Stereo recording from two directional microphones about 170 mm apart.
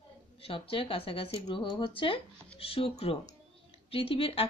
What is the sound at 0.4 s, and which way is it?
Speech, 30° left (ahead or behind).